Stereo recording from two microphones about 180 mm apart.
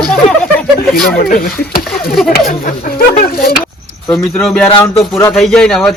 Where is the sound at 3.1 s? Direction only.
55° left (ahead or behind).